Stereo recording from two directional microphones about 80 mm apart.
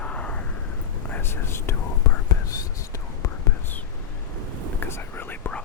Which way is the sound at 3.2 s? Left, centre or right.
Left.